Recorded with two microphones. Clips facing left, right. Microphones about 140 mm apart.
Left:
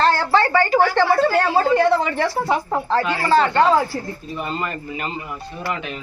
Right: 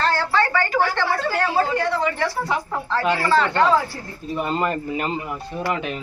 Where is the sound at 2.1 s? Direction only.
25° left (ahead or behind).